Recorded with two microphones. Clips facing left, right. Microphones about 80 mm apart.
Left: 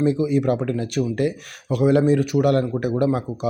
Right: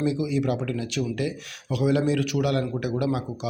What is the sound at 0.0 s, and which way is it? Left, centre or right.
Speech, left.